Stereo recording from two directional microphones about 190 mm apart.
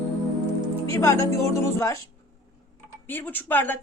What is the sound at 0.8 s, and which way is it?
A woman's voice, 15° left (ahead or behind).